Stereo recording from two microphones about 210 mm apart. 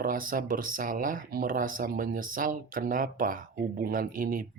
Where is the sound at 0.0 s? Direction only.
40° right (ahead or behind).